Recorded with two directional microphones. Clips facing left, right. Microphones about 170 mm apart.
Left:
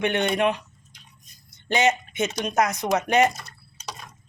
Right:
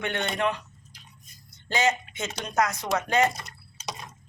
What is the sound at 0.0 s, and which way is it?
Speech, 20° left (ahead or behind).